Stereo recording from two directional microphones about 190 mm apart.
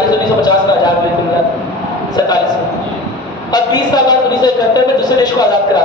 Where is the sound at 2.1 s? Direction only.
20° left (ahead or behind).